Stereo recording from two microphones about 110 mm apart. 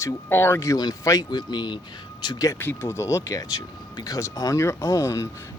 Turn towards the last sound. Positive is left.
turn(degrees=30)  # may be behind; listen again after turning